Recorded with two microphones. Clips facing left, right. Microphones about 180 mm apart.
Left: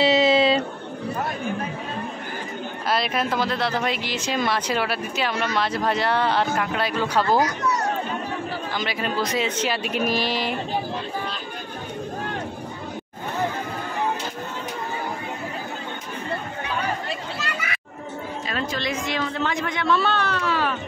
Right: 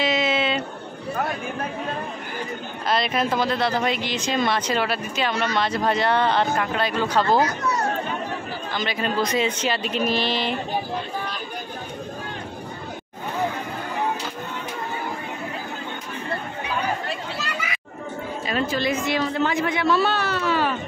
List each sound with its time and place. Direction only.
0.0 s a sound: 35° left (ahead or behind)
2.9 s speech: 5° left (ahead or behind)
8.7 s speech: 5° left (ahead or behind)
18.5 s speech: 5° right (ahead or behind)